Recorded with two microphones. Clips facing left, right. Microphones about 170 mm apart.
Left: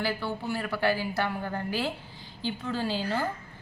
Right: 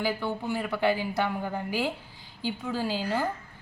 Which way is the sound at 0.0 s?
15° right (ahead or behind).